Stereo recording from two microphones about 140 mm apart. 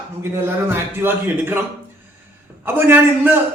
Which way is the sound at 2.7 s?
15° right (ahead or behind).